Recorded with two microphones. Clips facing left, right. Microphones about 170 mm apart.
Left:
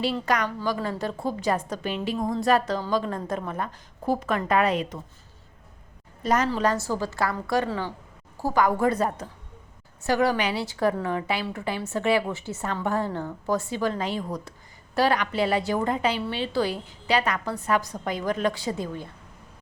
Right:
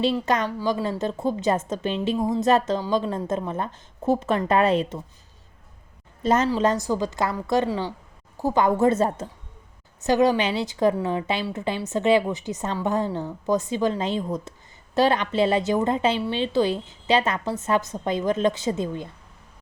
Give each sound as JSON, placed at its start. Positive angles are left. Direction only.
{"t": 0.0, "sound": "a woman's voice", "side_deg": -25}
{"t": 6.2, "sound": "a woman's voice", "side_deg": -25}